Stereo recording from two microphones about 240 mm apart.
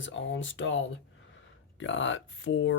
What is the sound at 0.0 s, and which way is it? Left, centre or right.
Speech, left.